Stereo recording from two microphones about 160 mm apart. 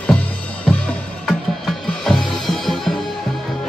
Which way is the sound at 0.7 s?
5° left (ahead or behind).